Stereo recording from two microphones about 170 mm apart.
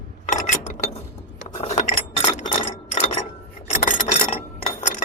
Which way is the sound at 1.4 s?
40° left (ahead or behind).